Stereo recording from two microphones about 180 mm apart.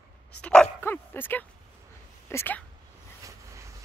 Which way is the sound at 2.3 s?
10° left (ahead or behind).